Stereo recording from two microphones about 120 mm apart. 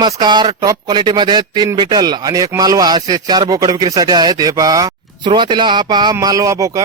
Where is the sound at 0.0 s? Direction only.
35° right (ahead or behind).